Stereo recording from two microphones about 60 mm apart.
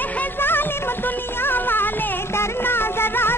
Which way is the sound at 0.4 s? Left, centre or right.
Left.